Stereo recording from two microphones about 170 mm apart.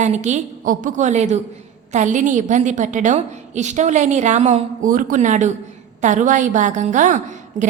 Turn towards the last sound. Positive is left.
turn(degrees=-45)  # may be behind; listen again after turning